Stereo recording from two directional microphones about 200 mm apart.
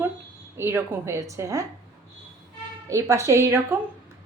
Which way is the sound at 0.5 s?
10° right (ahead or behind).